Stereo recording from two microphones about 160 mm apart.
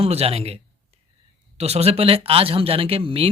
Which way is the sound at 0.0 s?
40° right (ahead or behind).